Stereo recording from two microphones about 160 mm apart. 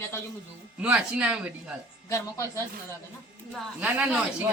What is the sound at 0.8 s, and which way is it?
Speech, 10° right (ahead or behind).